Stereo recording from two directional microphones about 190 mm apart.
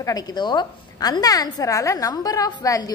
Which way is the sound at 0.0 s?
20° left (ahead or behind).